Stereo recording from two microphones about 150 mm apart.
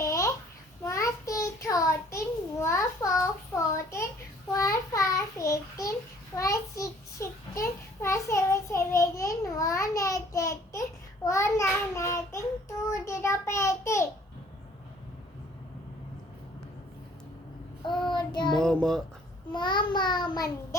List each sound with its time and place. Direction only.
0.0 s babbling: 20° left (ahead or behind)
0.9 s child singing: 20° left (ahead or behind)
3.5 s a sound: 20° left (ahead or behind)
4.5 s child singing: 20° left (ahead or behind)
18.1 s child singing: 30° left (ahead or behind)
18.5 s a sound: 5° left (ahead or behind)
19.5 s child singing: 30° left (ahead or behind)